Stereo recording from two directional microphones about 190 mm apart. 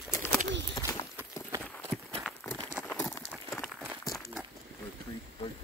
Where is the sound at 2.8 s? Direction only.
15° left (ahead or behind).